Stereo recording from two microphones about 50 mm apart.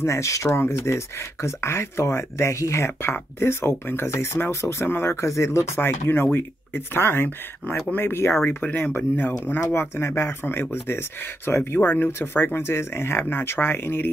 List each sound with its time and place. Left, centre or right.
0.0 s speech: left
0.6 s speech: left
5.8 s speech: left
8.6 s speech: left
10.0 s speech: left
10.4 s speech: left